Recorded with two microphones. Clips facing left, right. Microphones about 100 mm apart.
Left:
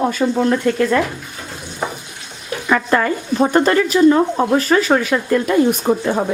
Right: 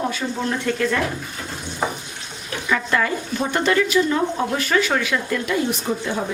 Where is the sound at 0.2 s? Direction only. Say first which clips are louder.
Left 9 dB; 50° left (ahead or behind).